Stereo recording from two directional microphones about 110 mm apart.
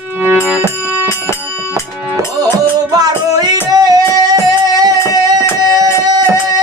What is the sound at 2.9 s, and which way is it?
Music, 35° right (ahead or behind).